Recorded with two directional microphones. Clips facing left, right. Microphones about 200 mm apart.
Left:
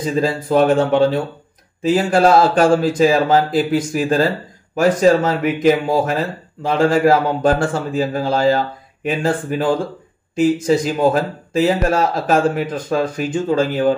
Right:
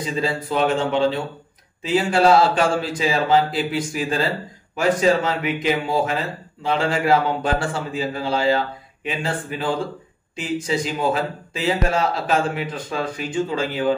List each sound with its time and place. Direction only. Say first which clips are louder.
0.0 s speech: left 5 dB; 45° left (ahead or behind)